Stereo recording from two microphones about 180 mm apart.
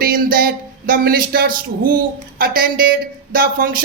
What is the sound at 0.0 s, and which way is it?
A woman's voice, 55° right (ahead or behind).